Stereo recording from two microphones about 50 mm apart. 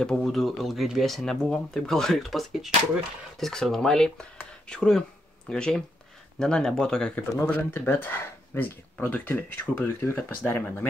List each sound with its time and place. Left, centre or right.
0.0 s speech: centre
7.4 s speech: left
9.9 s speech: left